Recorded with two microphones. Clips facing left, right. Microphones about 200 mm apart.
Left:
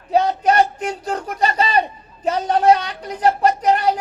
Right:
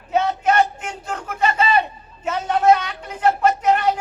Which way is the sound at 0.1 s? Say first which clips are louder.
Left 2 dB; 35° left (ahead or behind).